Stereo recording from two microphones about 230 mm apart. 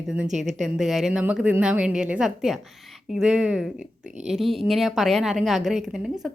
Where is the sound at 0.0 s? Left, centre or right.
Centre.